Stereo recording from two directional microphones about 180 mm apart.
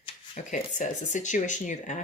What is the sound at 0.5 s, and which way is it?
Speech, 45° left (ahead or behind).